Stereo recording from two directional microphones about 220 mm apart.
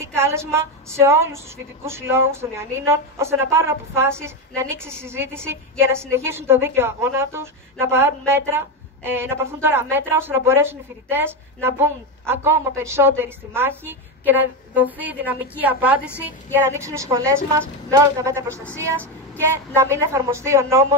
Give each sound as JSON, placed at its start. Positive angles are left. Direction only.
{"t": 0.0, "sound": "a woman's voice", "side_deg": -10}